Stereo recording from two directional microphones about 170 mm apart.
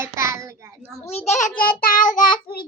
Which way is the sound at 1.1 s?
40° left (ahead or behind).